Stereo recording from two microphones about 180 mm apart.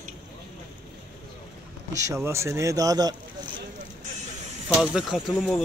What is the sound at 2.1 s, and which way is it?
Speech, 15° right (ahead or behind).